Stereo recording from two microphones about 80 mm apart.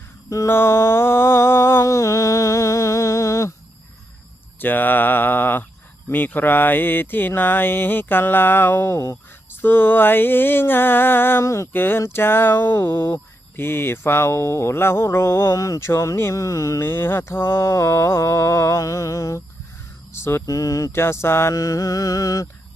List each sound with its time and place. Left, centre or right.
0.3 s mantra: left
0.5 s a sound: left
4.6 s a sound: left
6.1 s speech: left
11.7 s speech: left
20.1 s mantra: left
20.5 s mantra: left
21.0 s speech: left
21.5 s mantra: left